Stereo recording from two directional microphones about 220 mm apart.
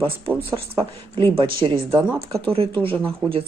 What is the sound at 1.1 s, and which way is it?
Speech, 25° right (ahead or behind).